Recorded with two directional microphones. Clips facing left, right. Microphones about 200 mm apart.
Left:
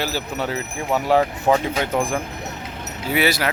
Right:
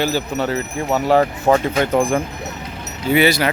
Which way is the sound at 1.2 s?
10° left (ahead or behind).